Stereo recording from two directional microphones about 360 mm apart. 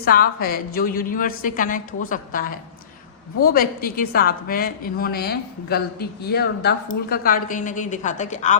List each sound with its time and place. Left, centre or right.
0.0 s a woman's voice: left